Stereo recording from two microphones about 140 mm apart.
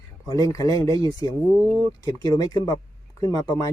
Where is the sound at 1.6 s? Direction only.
10° left (ahead or behind).